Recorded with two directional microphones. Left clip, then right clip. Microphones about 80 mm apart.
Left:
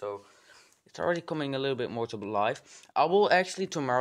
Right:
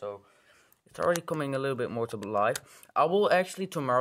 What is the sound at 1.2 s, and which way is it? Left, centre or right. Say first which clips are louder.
Speech: right 1 dB; centre.